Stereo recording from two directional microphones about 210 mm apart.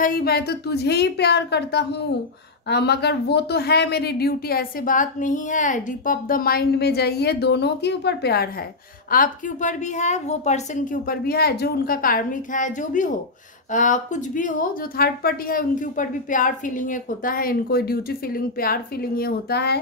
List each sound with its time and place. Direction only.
0.0 s a woman's voice: 45° left (ahead or behind)